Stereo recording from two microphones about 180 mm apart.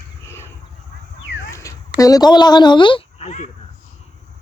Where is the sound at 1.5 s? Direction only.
15° left (ahead or behind); by 3.5 s 40° left (ahead or behind).